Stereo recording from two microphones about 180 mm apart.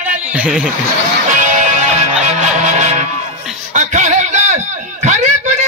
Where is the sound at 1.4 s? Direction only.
45° right (ahead or behind).